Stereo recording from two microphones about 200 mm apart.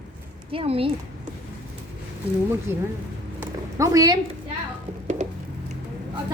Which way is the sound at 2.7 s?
10° right (ahead or behind).